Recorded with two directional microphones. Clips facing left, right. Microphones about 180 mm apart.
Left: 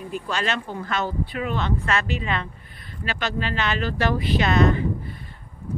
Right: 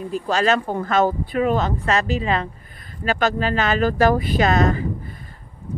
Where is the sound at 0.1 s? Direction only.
40° right (ahead or behind).